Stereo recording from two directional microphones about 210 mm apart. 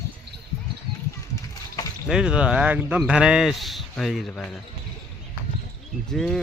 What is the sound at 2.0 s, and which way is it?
Speech, 5° right (ahead or behind).